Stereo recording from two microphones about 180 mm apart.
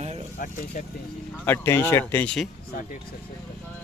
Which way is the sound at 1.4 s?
15° left (ahead or behind).